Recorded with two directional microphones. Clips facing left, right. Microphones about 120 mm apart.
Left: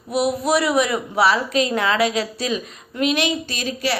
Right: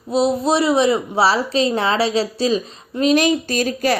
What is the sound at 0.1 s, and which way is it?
A woman's voice, 25° right (ahead or behind).